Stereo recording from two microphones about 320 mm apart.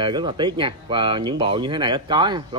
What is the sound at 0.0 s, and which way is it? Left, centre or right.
Speech, centre.